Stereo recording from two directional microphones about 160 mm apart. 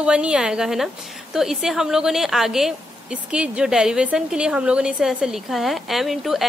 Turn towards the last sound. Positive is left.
turn(degrees=0)  # may be behind; listen again after turning